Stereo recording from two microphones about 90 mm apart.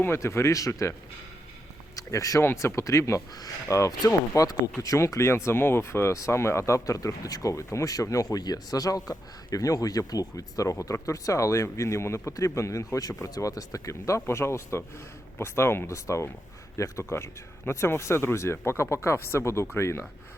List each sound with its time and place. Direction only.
0.0 s speech: 30° left (ahead or behind)
2.0 s speech: 40° left (ahead or behind)